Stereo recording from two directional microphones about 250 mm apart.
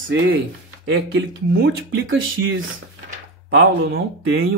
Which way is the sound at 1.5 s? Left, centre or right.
Right.